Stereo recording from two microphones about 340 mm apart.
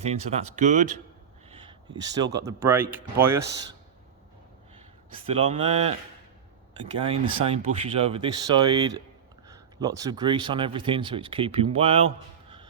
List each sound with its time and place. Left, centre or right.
0.0 s speech: centre
5.1 s speech: centre
7.0 s speech: centre